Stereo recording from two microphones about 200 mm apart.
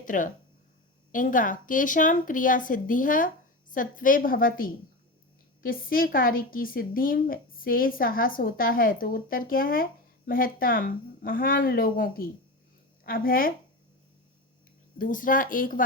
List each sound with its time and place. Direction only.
0.0 s a woman's voice: 40° left (ahead or behind)
14.9 s a woman's voice: 40° left (ahead or behind)